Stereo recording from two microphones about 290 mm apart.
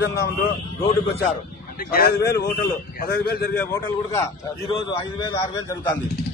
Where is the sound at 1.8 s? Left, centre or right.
Left.